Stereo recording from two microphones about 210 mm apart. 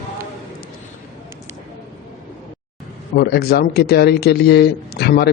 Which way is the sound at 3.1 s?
50° left (ahead or behind).